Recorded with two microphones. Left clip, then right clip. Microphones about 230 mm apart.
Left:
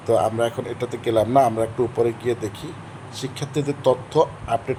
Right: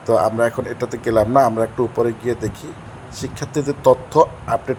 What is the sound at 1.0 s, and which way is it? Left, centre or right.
Speech, centre.